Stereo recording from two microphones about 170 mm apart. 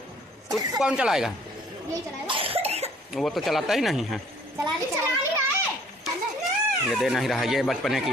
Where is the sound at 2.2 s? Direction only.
35° right (ahead or behind).